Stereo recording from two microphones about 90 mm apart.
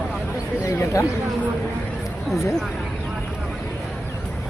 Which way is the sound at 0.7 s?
35° left (ahead or behind).